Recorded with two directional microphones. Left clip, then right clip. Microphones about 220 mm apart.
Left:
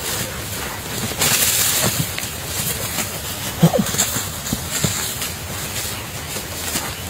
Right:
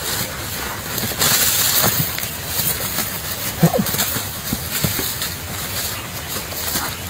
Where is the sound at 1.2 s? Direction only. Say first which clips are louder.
Right 1 dB; 15° left (ahead or behind).